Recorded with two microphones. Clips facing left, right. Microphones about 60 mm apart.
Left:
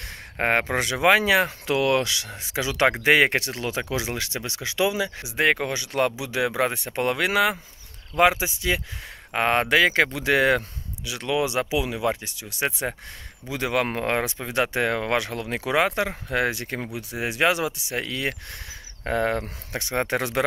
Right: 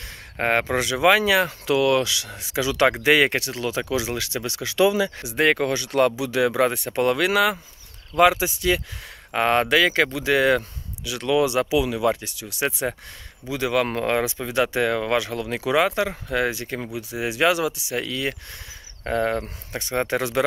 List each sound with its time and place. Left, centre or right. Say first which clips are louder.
0.4 s speech: right 1 dB; left
4.4 s speech: right 3 dB; left
4.7 s speech: right 5 dB; centre; by 10.0 s left
10.1 s speech: right 1 dB; left
11.1 s speech: right 4 dB; left
13.5 s speech: right 2 dB; left
15.4 s speech: right 2 dB; left
19.4 s speech: even; left
19.9 s speech: right 2 dB; left